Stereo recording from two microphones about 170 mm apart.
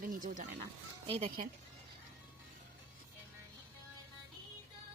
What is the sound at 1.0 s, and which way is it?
Speech, 35° right (ahead or behind).